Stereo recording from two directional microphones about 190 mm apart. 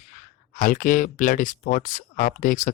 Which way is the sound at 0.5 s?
45° left (ahead or behind).